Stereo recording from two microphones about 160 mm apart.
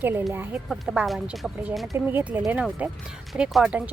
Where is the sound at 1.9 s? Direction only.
15° right (ahead or behind).